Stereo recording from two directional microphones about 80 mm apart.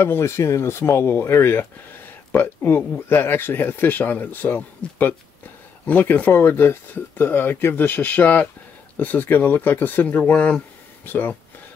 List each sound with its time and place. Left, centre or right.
0.0 s speech: left